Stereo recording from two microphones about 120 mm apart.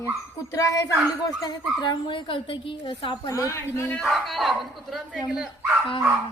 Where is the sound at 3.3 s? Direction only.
25° left (ahead or behind).